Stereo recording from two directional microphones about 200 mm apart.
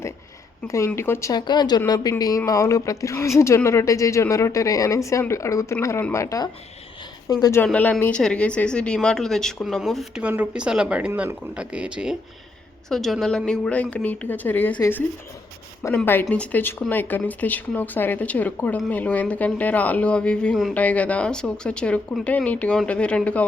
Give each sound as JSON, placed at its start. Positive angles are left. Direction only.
{"t": 0.7, "sound": "speech", "side_deg": 15}